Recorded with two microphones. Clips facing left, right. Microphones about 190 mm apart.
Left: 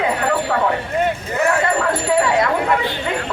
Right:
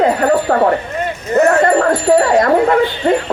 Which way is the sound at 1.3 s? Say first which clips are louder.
Right 9 dB; 40° right (ahead or behind).